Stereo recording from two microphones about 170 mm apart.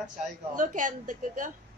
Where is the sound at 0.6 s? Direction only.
50° right (ahead or behind).